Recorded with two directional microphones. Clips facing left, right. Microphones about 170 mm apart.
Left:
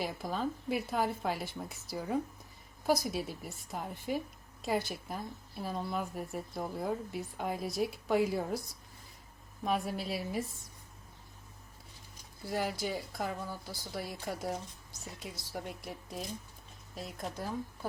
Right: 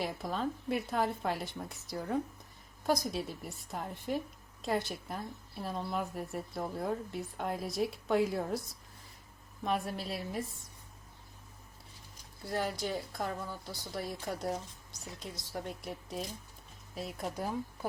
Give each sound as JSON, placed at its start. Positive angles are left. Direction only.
{"t": 0.0, "sound": "a woman's voice", "side_deg": 0}
{"t": 9.6, "sound": "a woman's voice", "side_deg": 0}
{"t": 12.5, "sound": "a woman's voice", "side_deg": 5}